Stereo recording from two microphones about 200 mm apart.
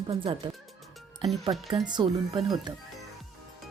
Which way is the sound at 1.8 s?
25° right (ahead or behind).